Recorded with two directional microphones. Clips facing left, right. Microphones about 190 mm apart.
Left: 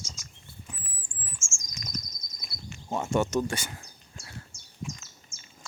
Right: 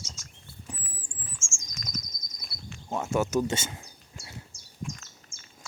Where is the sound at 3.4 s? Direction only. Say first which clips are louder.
Right 3 dB; 20° right (ahead or behind).